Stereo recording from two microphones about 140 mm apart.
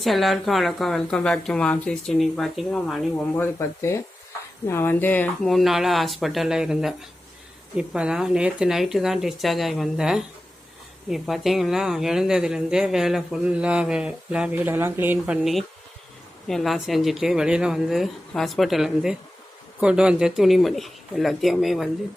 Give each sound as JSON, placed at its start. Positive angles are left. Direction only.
{"t": 0.0, "sound": "speech", "side_deg": 0}
{"t": 3.3, "sound": "speech", "side_deg": 15}
{"t": 16.5, "sound": "speech", "side_deg": 0}